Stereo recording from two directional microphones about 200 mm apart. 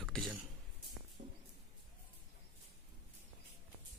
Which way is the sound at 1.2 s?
50° right (ahead or behind).